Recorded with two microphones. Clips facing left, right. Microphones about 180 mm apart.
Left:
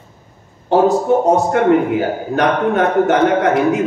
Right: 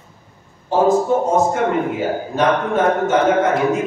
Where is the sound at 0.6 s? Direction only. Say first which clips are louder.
Left 2 dB; 70° left (ahead or behind).